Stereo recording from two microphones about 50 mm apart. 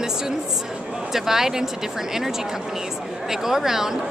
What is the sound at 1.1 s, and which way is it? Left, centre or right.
Speech, centre.